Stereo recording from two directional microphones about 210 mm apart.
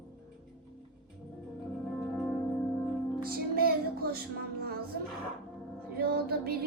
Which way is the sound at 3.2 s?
45° right (ahead or behind).